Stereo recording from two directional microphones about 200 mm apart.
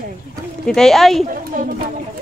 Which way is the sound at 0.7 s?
Centre (ahead or behind).